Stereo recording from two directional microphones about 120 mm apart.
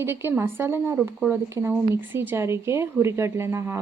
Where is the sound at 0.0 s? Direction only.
20° right (ahead or behind).